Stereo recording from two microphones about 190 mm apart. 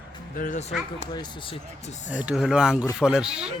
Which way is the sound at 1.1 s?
30° left (ahead or behind).